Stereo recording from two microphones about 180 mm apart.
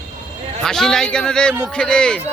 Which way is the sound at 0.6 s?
5° left (ahead or behind).